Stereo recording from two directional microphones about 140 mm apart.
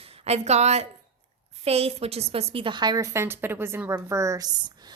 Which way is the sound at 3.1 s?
15° right (ahead or behind).